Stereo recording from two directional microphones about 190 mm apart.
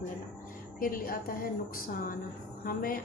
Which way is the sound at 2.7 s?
50° left (ahead or behind).